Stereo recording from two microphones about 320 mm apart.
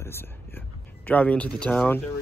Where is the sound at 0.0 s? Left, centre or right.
Centre.